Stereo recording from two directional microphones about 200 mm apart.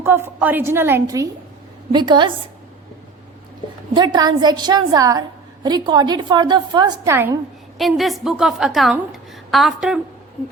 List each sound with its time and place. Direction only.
0.0 s a woman's voice: 10° right (ahead or behind)
3.9 s a woman's voice: 20° right (ahead or behind)
7.8 s a woman's voice: centre (ahead or behind)